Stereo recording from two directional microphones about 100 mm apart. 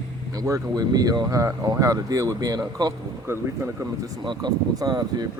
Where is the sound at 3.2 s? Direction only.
25° right (ahead or behind).